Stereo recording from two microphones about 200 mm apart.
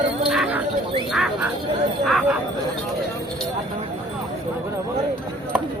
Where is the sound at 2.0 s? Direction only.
Centre (ahead or behind).